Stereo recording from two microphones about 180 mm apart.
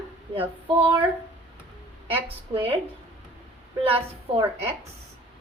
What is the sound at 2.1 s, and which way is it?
Speech, 30° right (ahead or behind).